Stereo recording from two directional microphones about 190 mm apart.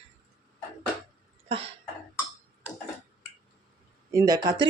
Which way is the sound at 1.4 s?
30° right (ahead or behind).